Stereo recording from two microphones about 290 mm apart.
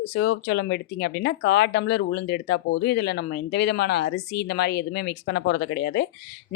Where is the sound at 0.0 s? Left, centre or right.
Left.